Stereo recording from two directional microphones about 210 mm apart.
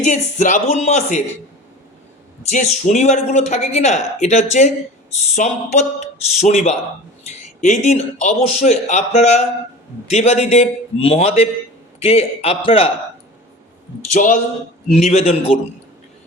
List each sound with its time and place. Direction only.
0.0 s speech: 35° left (ahead or behind)
2.4 s a man's voice: 35° left (ahead or behind)
14.1 s speech: 35° left (ahead or behind)